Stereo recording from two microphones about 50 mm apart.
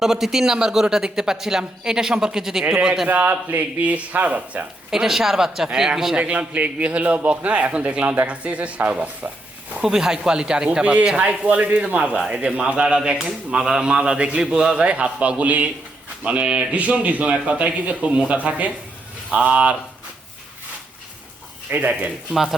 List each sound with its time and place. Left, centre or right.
0.0 s speech: centre
3.1 s speech: right
4.9 s speech: centre
6.1 s a man's voice: right
9.8 s a man's voice: centre; by 17.3 s right
17.3 s speech: centre
17.6 s a man's voice: right
21.7 s speech: right